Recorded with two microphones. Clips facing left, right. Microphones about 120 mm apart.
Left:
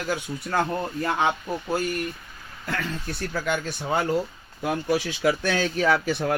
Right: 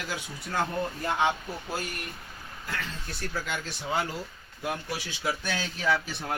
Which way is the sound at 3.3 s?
60° left (ahead or behind).